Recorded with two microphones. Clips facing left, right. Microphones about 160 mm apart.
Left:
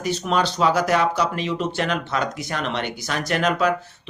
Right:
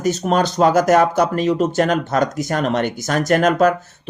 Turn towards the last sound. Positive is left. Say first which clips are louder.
# right 6 dB
turn(degrees=-45)  # may be behind; listen again after turning